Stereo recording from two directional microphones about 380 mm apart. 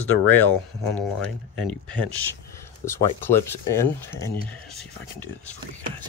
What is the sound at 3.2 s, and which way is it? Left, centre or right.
Speech, centre.